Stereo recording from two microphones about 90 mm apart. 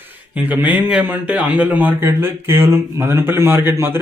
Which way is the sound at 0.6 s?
20° right (ahead or behind).